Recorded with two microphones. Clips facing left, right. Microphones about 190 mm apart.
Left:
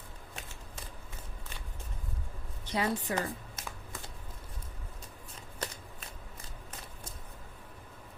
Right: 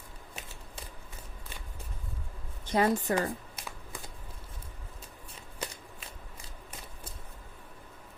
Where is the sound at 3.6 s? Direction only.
10° right (ahead or behind).